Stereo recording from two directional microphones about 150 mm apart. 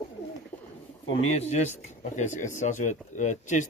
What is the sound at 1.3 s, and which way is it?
Speech, 45° left (ahead or behind).